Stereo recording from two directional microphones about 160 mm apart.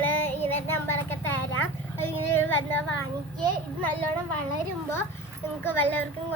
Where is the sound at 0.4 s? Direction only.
15° left (ahead or behind).